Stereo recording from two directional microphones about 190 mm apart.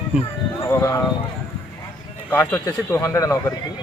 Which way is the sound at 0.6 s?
15° left (ahead or behind).